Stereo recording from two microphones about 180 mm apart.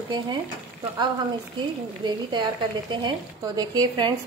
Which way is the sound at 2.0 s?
25° right (ahead or behind).